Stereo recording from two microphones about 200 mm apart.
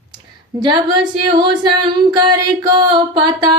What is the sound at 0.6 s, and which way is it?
Music, 20° right (ahead or behind).